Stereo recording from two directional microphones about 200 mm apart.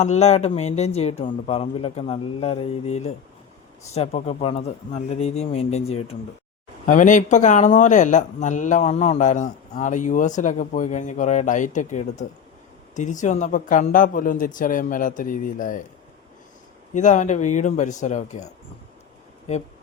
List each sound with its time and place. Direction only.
0.0 s speech: 35° left (ahead or behind)
16.9 s speech: 35° left (ahead or behind)